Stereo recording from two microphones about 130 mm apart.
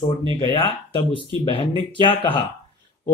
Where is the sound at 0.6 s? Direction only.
40° left (ahead or behind).